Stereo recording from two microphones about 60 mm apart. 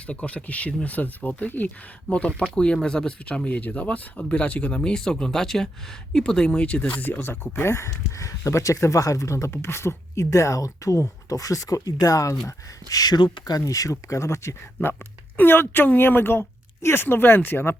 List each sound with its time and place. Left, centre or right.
0.1 s speech: centre
2.0 s speech: centre
7.0 s speech: left
13.7 s speech: left
14.8 s speech: left